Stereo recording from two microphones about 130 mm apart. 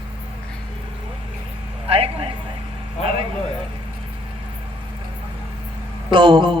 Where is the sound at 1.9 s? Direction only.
45° right (ahead or behind).